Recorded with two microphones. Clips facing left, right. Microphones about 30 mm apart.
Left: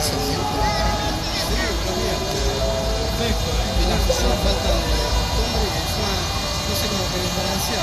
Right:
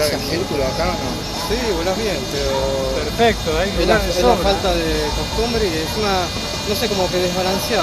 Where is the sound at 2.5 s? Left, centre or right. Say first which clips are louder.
Right 6 dB; centre.